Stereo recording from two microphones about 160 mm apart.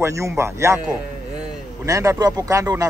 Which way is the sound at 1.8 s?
20° right (ahead or behind).